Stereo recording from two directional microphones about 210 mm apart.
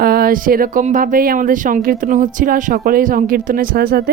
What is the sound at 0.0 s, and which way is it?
Speech, 45° right (ahead or behind).